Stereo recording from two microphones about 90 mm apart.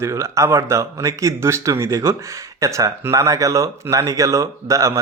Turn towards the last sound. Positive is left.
turn(degrees=-35)  # may be behind; listen again after turning